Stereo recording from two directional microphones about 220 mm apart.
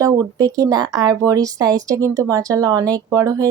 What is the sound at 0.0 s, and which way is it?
Speech, 15° right (ahead or behind).